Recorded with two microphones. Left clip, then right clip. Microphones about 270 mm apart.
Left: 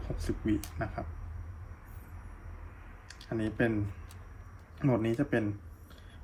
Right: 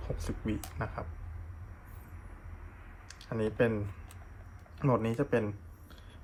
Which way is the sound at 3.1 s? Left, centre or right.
Centre.